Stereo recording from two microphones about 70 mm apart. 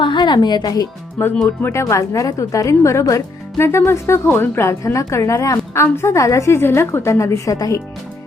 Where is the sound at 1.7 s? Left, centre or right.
Left.